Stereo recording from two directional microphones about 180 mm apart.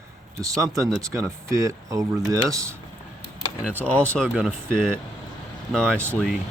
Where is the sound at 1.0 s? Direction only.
15° right (ahead or behind); by 6.0 s 5° left (ahead or behind).